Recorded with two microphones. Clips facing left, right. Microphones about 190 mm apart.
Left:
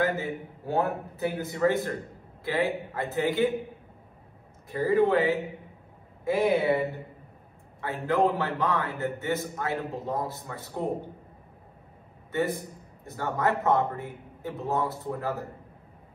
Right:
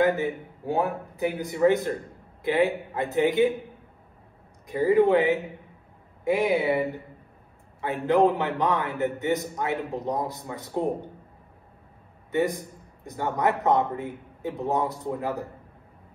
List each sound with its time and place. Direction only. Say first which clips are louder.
0.0 s a man's voice: right 5 dB; 15° right (ahead or behind)
4.6 s a man's voice: right 3 dB; 15° right (ahead or behind)
7.8 s a man's voice: right 4 dB; 15° right (ahead or behind)
12.3 s a man's voice: right 3 dB; 15° right (ahead or behind)